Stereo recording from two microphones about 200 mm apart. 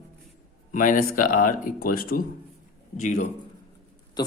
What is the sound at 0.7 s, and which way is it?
Speech, 40° left (ahead or behind).